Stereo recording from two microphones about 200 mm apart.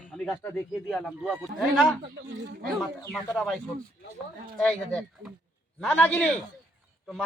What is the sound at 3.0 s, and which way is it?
Speech, 15° left (ahead or behind).